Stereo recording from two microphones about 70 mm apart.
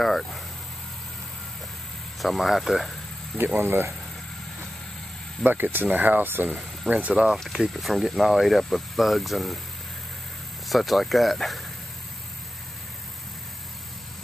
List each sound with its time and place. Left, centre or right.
0.0 s speech: centre
2.2 s speech: centre
3.5 s speech: right
5.4 s speech: right
7.2 s speech: centre
10.7 s speech: centre